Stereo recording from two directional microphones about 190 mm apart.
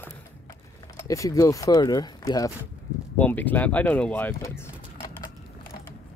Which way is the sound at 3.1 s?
10° left (ahead or behind).